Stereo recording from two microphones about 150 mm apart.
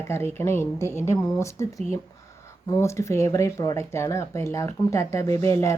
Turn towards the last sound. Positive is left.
turn(degrees=20)  # may be behind; listen again after turning